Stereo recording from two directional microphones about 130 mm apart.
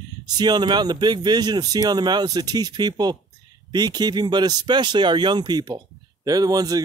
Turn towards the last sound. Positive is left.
turn(degrees=-30)  # may be behind; listen again after turning